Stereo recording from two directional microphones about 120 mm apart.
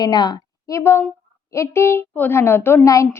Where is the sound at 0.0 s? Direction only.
35° left (ahead or behind).